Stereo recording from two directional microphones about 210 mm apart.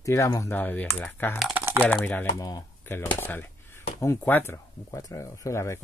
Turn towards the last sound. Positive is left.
turn(degrees=15)  # may be behind; listen again after turning